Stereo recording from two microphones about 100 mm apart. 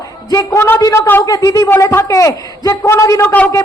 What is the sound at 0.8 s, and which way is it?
Speech, 40° left (ahead or behind).